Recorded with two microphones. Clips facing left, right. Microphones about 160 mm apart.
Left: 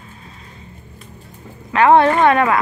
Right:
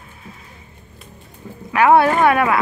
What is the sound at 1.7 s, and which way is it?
Speech, 10° right (ahead or behind).